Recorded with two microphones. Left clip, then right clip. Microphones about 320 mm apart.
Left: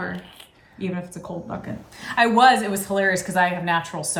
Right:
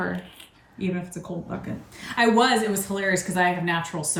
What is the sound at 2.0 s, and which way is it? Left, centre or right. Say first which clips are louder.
Speech: left 4 dB; centre.